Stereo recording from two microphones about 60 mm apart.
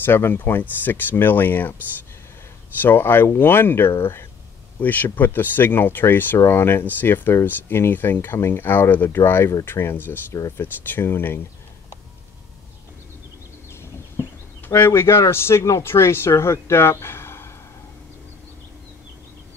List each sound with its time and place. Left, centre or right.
0.0 s speech: left
2.8 s speech: left
4.7 s speech: left
13.7 s a sound: left
15.8 s speech: left